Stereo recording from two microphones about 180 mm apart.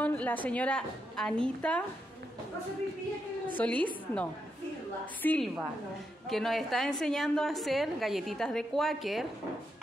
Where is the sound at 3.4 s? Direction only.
10° left (ahead or behind).